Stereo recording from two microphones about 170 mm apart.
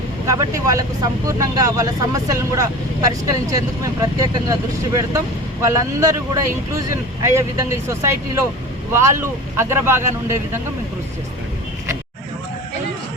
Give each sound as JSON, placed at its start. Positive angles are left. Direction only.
{"t": 0.3, "sound": "speech", "side_deg": -20}
{"t": 5.6, "sound": "speech", "side_deg": -20}